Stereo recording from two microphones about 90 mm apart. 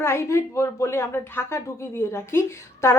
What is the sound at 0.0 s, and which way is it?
A woman's voice, 30° left (ahead or behind).